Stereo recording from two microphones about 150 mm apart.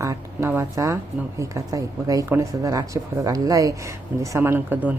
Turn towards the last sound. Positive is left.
turn(degrees=-10)  # may be behind; listen again after turning